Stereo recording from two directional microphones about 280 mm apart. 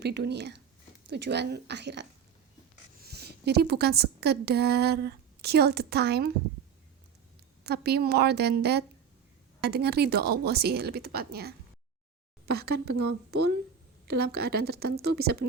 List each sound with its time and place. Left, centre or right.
0.0 s a woman's voice: right
3.1 s a woman's voice: right
7.6 s a woman's voice: right